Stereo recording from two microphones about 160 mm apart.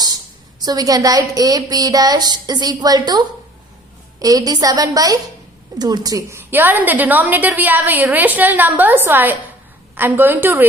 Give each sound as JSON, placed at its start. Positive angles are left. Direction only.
{"t": 0.6, "sound": "a woman's voice", "side_deg": -25}